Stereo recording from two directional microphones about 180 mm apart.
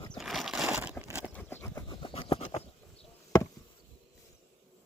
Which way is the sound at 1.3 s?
10° left (ahead or behind).